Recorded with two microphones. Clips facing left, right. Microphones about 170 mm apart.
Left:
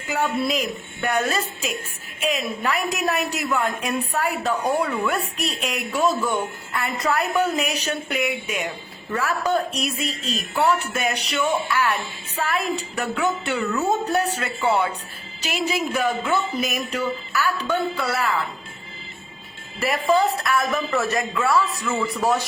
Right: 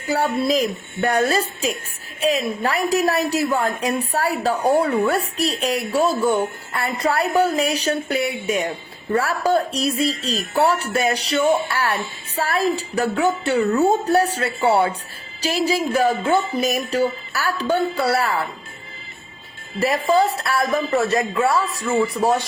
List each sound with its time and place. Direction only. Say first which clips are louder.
0.1 s a woman's voice: right 4 dB; 35° right (ahead or behind)
19.8 s speech: right 2 dB; 30° right (ahead or behind)